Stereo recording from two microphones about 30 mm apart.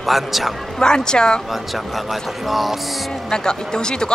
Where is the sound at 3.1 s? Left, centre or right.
Left.